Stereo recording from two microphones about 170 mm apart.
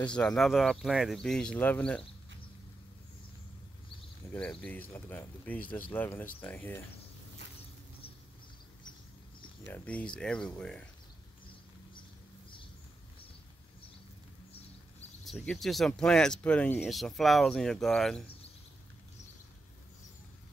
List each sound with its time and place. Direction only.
0.1 s speech: 5° left (ahead or behind)
4.3 s speech: 5° left (ahead or behind)
9.7 s speech: 10° left (ahead or behind)
15.2 s speech: centre (ahead or behind)